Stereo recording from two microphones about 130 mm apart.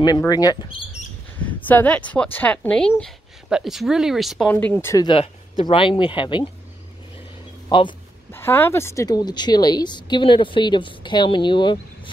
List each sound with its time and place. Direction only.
0.3 s speech: 30° left (ahead or behind)
1.4 s speech: 10° left (ahead or behind)
3.4 s speech: 5° right (ahead or behind)
4.5 s speech: 15° left (ahead or behind)
5.1 s speech: 45° left (ahead or behind)
7.7 s speech: 40° left (ahead or behind)
8.3 s speech: 15° left (ahead or behind); by 11.8 s 35° left (ahead or behind)